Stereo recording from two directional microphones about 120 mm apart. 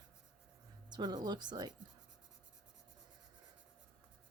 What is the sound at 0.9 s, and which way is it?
Speech, 35° right (ahead or behind).